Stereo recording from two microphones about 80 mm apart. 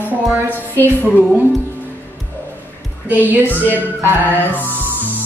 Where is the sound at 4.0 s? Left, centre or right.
Right.